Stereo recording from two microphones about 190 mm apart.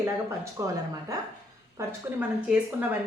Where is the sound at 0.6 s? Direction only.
15° right (ahead or behind).